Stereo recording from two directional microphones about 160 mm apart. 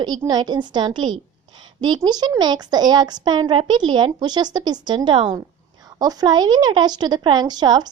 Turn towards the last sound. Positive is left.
turn(degrees=-25)  # may be behind; listen again after turning